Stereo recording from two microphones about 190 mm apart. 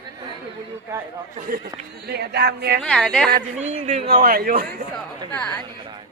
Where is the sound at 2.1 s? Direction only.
60° right (ahead or behind).